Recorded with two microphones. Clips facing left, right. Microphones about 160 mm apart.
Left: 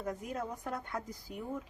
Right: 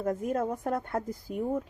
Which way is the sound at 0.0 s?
50° right (ahead or behind).